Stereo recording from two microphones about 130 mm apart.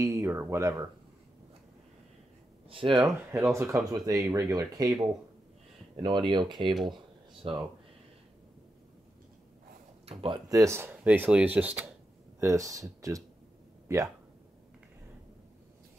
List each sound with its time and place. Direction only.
0.0 s speech: 20° right (ahead or behind)
2.7 s speech: 40° right (ahead or behind)
3.3 s speech: 20° right (ahead or behind)
5.9 s speech: 40° right (ahead or behind)
10.0 s speech: 40° right (ahead or behind)
10.5 s speech: 20° right (ahead or behind)
12.4 s speech: 25° right (ahead or behind)